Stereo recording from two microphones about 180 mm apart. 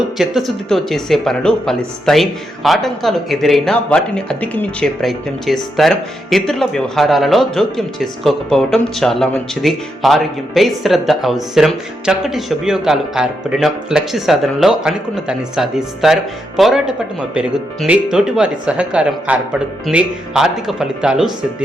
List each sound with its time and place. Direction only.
0.2 s speech: centre (ahead or behind)